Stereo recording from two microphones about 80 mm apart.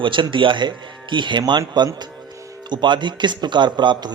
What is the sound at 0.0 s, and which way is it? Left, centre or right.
A man's voice, right.